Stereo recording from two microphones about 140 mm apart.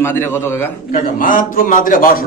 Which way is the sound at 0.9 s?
75° left (ahead or behind).